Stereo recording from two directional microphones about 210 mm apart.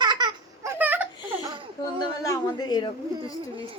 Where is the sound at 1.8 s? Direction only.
20° left (ahead or behind).